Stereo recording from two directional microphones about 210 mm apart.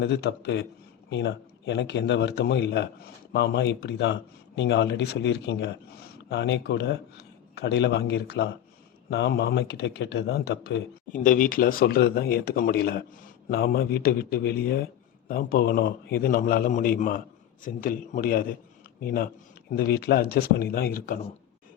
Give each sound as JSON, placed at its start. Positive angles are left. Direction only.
{"t": 0.0, "sound": "a man's voice", "side_deg": 55}
{"t": 11.1, "sound": "a man's voice", "side_deg": 40}